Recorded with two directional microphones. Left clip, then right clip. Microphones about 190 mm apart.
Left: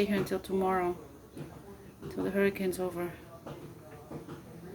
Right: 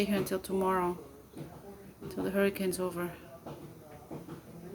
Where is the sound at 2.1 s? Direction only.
15° right (ahead or behind).